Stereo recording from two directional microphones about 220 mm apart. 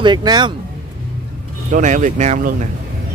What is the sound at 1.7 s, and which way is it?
Speech, 35° right (ahead or behind).